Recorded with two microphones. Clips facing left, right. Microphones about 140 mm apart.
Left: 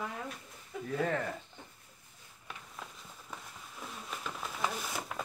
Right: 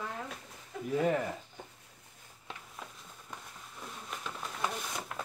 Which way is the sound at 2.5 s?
25° right (ahead or behind).